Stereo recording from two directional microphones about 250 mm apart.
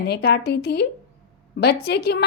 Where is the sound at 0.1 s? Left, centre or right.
Left.